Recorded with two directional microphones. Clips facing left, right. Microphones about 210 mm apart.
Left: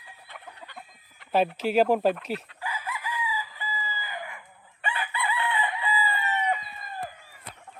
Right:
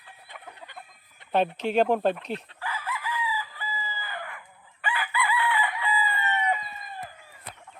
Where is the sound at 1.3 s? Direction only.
5° left (ahead or behind).